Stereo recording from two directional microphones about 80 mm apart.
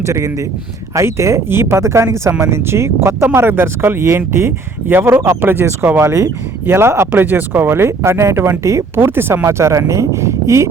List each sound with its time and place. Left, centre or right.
0.0 s speech: right